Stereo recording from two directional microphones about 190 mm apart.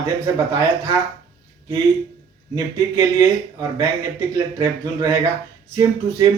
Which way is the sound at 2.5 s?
20° right (ahead or behind).